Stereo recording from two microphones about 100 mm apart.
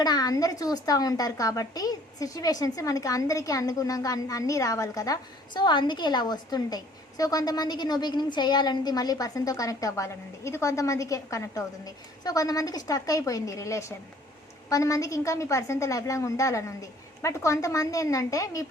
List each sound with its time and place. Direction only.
0.0 s a woman's voice: 40° left (ahead or behind)